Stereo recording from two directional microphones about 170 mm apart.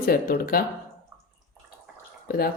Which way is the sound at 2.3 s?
60° left (ahead or behind).